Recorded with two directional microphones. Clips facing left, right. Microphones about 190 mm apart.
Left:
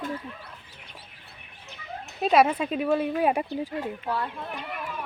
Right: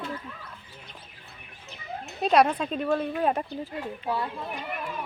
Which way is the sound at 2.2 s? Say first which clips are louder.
Left 1 dB; 5° left (ahead or behind).